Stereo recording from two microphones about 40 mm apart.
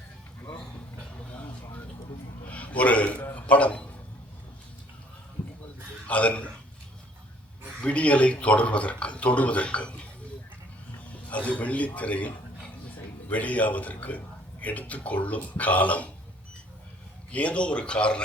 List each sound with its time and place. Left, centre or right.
2.5 s a sound: left
3.3 s a man's voice: left
6.1 s speech: left
7.8 s speech: left
11.3 s speech: left
17.3 s speech: left